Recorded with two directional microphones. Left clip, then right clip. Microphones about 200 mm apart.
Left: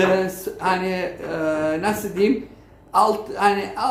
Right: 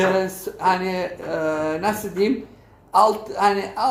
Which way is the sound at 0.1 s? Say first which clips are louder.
Left 1 dB; 20° right (ahead or behind).